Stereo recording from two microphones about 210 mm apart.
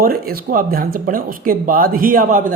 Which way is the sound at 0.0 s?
45° right (ahead or behind).